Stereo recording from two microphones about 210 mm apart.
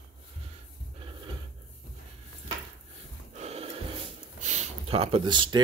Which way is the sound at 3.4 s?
30° right (ahead or behind).